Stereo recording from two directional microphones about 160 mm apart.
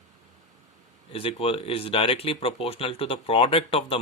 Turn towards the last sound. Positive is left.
turn(degrees=35)  # may be behind; listen again after turning